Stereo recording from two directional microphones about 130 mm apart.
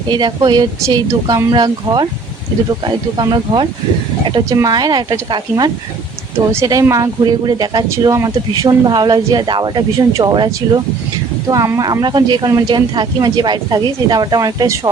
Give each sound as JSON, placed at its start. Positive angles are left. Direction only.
{"t": 0.1, "sound": "speech", "side_deg": -35}